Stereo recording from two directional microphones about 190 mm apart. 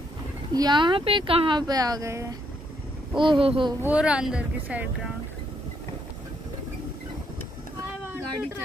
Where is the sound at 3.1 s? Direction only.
25° right (ahead or behind).